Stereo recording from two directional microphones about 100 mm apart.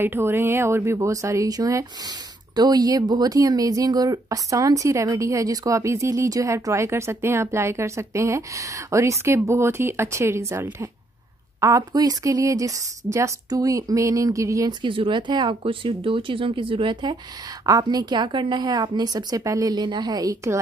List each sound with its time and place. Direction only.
0.0 s speech: 25° right (ahead or behind)
14.7 s a woman's voice: 55° right (ahead or behind); by 20.5 s 40° right (ahead or behind)